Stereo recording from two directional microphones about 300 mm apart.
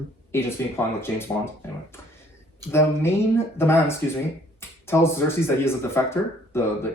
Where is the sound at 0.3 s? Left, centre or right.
Centre.